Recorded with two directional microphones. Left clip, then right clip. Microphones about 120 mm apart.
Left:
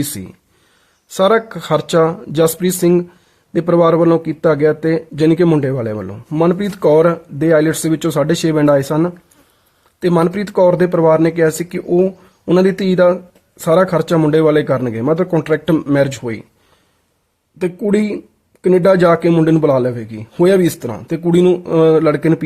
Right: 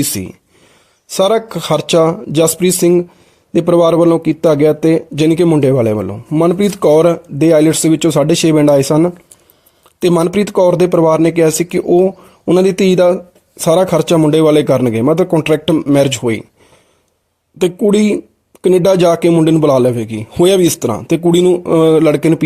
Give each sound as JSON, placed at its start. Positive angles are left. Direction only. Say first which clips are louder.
{"t": 0.0, "sound": "speech", "louder": "right 5 dB", "side_deg": -40}
{"t": 6.1, "sound": "speech", "louder": "right 2 dB", "side_deg": -20}
{"t": 10.0, "sound": "speech", "louder": "right 3 dB", "side_deg": -30}
{"t": 11.9, "sound": "speech", "louder": "right 3 dB", "side_deg": -25}
{"t": 12.6, "sound": "speech", "louder": "right 3 dB", "side_deg": -40}
{"t": 15.7, "sound": "a man's voice", "louder": "right 3 dB", "side_deg": -20}
{"t": 16.0, "sound": "speech", "louder": "right 4 dB", "side_deg": -40}
{"t": 17.8, "sound": "speech", "louder": "right 4 dB", "side_deg": -40}
{"t": 19.3, "sound": "a man's voice", "louder": "right 2 dB", "side_deg": -20}
{"t": 19.6, "sound": "speech", "louder": "right 3 dB", "side_deg": -40}
{"t": 21.4, "sound": "speech", "louder": "left 1 dB", "side_deg": -25}